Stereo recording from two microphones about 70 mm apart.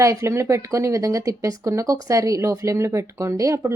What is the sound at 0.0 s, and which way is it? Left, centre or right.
Speech, right.